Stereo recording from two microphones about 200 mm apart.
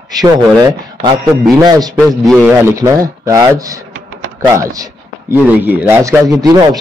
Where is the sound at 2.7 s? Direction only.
15° right (ahead or behind).